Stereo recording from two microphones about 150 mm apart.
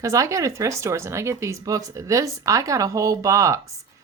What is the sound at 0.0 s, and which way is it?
Speech, 20° right (ahead or behind).